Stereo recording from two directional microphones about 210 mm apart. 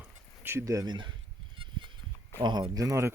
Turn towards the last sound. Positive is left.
turn(degrees=-15)  # may be behind; listen again after turning